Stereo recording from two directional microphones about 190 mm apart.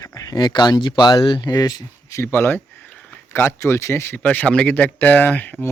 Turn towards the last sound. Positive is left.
turn(degrees=10)  # may be behind; listen again after turning